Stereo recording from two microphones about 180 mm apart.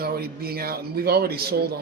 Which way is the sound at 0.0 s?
60° right (ahead or behind).